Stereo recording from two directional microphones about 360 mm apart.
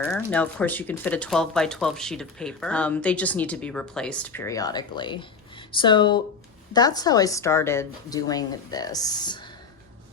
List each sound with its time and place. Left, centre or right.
0.3 s a woman's voice: centre